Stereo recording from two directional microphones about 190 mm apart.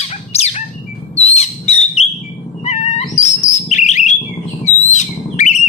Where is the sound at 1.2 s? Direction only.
35° left (ahead or behind).